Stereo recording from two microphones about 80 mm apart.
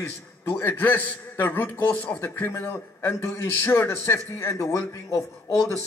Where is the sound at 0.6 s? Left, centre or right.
Left.